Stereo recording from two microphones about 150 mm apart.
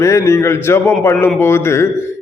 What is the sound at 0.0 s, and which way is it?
A man's voice, 20° left (ahead or behind).